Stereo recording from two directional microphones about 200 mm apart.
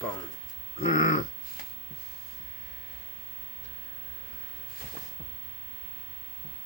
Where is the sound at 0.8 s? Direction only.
30° left (ahead or behind).